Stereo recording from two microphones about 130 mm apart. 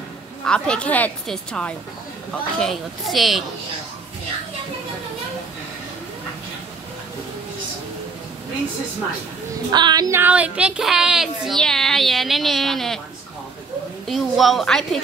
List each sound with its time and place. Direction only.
0.5 s a woman's voice: 5° left (ahead or behind)
9.7 s child singing: 35° right (ahead or behind)
10.1 s a woman's voice: 10° right (ahead or behind)
14.0 s a woman's voice: centre (ahead or behind)